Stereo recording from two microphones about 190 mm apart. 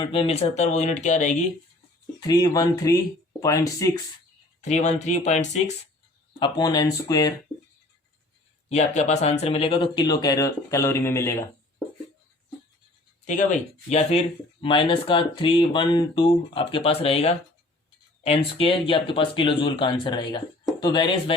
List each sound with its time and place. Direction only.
0.0 s speech: 25° left (ahead or behind)
2.2 s speech: 20° left (ahead or behind)
4.7 s speech: 40° left (ahead or behind)
6.4 s speech: 20° left (ahead or behind)
8.7 s speech: 35° left (ahead or behind); by 11.4 s 15° left (ahead or behind)
13.2 s speech: 40° left (ahead or behind)
14.6 s speech: 25° left (ahead or behind)